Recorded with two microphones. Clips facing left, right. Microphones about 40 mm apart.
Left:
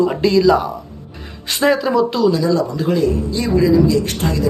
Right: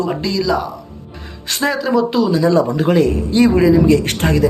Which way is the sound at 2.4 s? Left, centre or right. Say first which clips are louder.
Right 3 dB; right.